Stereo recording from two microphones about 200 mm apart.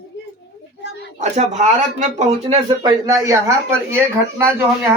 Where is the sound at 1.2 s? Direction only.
35° right (ahead or behind).